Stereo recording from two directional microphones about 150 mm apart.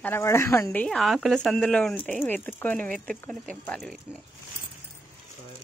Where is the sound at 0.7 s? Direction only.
5° left (ahead or behind).